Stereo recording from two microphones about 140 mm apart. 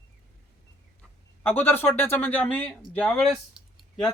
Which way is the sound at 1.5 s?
15° left (ahead or behind).